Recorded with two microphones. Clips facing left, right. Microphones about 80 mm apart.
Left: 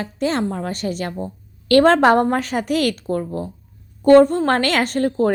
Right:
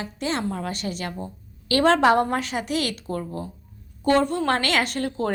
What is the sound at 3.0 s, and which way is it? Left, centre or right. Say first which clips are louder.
A woman's voice: left 6 dB; left.